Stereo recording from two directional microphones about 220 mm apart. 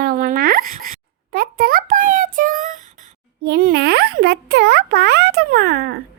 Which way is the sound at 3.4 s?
45° right (ahead or behind).